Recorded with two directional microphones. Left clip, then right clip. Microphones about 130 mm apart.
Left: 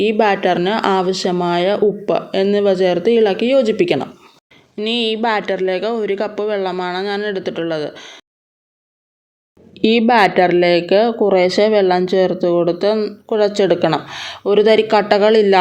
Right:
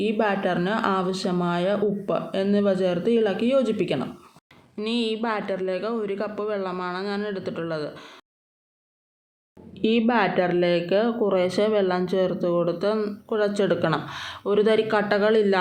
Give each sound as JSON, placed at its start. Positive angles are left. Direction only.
{"t": 0.0, "sound": "speech", "side_deg": 60}
{"t": 4.8, "sound": "speech", "side_deg": 40}
{"t": 9.7, "sound": "speech", "side_deg": 50}